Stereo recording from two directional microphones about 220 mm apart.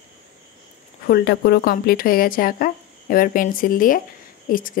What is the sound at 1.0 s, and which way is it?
Speech, 45° left (ahead or behind).